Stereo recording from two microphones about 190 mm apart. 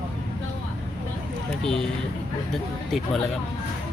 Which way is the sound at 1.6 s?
5° left (ahead or behind).